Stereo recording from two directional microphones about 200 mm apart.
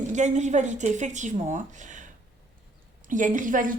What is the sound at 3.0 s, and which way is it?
Speech, 40° right (ahead or behind).